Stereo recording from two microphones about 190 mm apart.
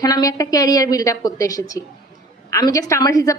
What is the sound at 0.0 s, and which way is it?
A woman's voice, 20° left (ahead or behind).